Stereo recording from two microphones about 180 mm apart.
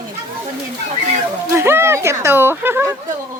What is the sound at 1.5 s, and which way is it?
Speech, 15° right (ahead or behind).